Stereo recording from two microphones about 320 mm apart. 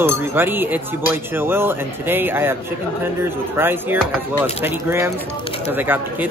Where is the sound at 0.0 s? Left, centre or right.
Centre.